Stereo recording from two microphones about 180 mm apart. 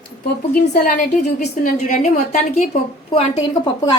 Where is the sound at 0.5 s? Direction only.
55° left (ahead or behind).